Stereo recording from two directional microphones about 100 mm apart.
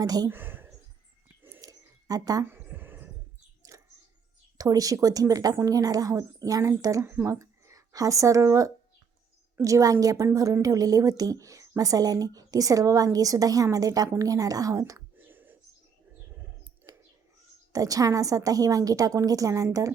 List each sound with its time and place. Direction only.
0.0 s a woman's voice: 40° right (ahead or behind)
0.3 s speech: 20° right (ahead or behind)
1.6 s a sound: 40° right (ahead or behind)
2.4 s a sound: 20° right (ahead or behind)
3.6 s bird: 35° right (ahead or behind)
4.5 s a woman's voice: 35° right (ahead or behind)
7.0 s a woman's voice: 20° right (ahead or behind)
15.1 s a sound: 20° right (ahead or behind)
17.7 s a woman's voice: 35° right (ahead or behind)